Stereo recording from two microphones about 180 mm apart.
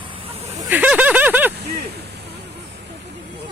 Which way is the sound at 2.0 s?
65° right (ahead or behind).